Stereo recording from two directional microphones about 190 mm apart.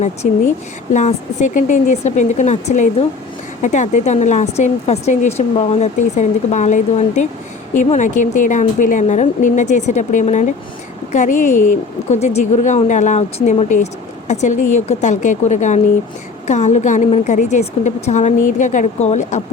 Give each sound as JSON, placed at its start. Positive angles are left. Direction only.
{"t": 0.0, "sound": "speech", "side_deg": 40}